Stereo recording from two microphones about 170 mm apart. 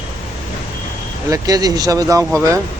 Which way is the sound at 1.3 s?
20° right (ahead or behind).